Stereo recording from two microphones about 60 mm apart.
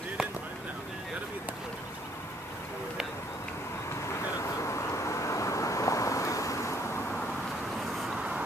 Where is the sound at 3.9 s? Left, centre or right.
Left.